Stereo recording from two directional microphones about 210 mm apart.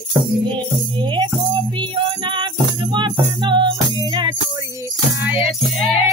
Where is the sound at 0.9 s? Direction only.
20° right (ahead or behind).